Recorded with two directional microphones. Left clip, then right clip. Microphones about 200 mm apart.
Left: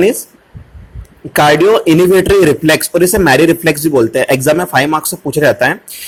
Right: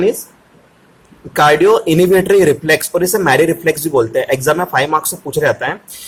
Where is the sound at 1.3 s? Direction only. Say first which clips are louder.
Left 2 dB; 20° left (ahead or behind).